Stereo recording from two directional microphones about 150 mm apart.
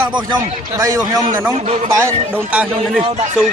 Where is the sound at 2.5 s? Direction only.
10° right (ahead or behind).